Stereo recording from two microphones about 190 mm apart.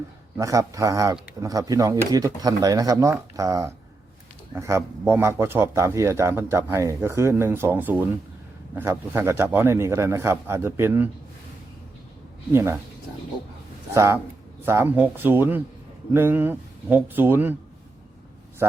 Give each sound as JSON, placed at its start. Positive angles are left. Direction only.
{"t": 0.3, "sound": "speech", "side_deg": -15}
{"t": 12.5, "sound": "speech", "side_deg": -10}
{"t": 13.9, "sound": "speech", "side_deg": -15}